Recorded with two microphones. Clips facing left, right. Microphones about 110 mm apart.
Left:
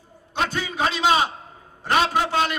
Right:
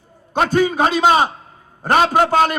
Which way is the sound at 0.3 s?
45° right (ahead or behind).